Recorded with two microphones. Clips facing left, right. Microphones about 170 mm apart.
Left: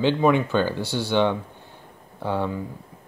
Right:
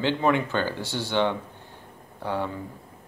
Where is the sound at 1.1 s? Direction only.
15° left (ahead or behind).